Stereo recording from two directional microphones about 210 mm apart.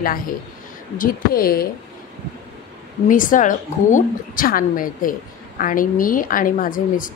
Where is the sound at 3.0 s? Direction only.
40° left (ahead or behind).